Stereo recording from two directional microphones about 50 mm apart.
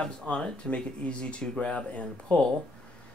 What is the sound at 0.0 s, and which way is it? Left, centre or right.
Speech, centre.